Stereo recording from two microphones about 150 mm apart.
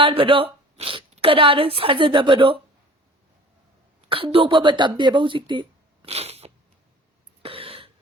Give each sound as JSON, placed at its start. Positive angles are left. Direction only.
{"t": 0.0, "sound": "speech", "side_deg": -35}
{"t": 4.1, "sound": "speech", "side_deg": -40}
{"t": 6.1, "sound": "a sound", "side_deg": -45}
{"t": 7.4, "sound": "cough", "side_deg": -40}